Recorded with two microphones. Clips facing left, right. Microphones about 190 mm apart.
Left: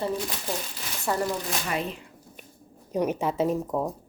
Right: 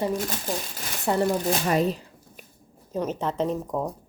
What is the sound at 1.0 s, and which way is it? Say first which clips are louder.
Speech: right 4 dB; 25° right (ahead or behind).